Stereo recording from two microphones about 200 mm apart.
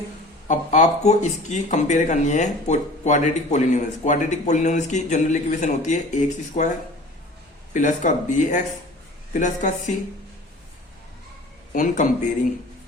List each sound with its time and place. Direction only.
0.4 s speech: 40° left (ahead or behind)
7.7 s speech: 40° left (ahead or behind)
11.7 s speech: 40° left (ahead or behind)